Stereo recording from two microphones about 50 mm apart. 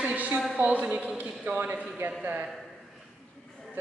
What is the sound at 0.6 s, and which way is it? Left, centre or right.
Speech, right.